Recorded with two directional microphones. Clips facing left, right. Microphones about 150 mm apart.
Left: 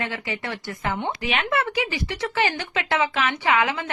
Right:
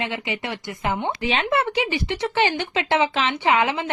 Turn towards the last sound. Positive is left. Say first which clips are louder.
# right 2 dB
turn(degrees=-25)  # may be behind; listen again after turning